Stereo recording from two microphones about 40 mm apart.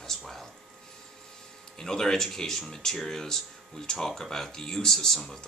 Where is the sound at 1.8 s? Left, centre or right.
Centre.